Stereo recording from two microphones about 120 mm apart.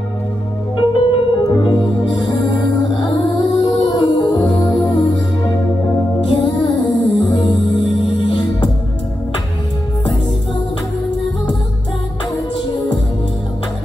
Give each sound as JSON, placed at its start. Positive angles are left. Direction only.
{"t": 0.7, "sound": "music", "side_deg": 45}